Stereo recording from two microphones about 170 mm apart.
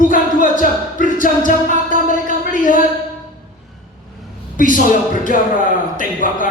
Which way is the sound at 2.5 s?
50° left (ahead or behind).